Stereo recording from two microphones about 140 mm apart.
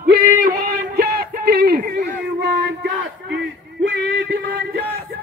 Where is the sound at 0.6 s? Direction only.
90° right.